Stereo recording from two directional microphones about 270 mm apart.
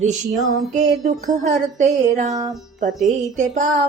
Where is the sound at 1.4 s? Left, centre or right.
Right.